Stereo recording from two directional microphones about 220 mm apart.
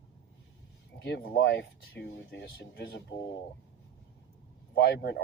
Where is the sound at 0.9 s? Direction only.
50° left (ahead or behind).